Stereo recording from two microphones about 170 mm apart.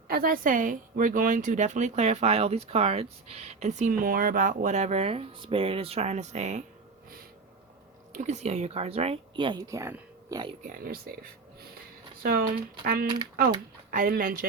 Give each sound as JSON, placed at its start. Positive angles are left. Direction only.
{"t": 0.1, "sound": "speech", "side_deg": -55}
{"t": 8.1, "sound": "speech", "side_deg": -45}
{"t": 10.7, "sound": "speech", "side_deg": -60}
{"t": 12.2, "sound": "speech", "side_deg": -60}